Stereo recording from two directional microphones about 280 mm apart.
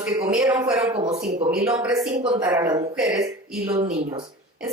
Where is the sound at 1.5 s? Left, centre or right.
Centre.